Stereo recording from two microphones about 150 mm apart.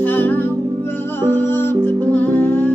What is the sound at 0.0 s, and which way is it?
Music, 15° left (ahead or behind).